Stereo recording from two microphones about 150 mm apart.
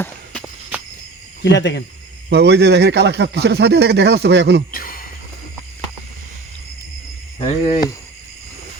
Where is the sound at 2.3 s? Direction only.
90° right.